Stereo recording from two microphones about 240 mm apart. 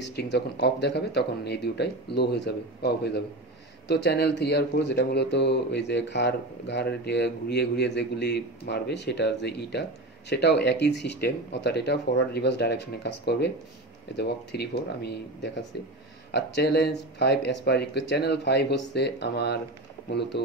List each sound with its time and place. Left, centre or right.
0.0 s speech: left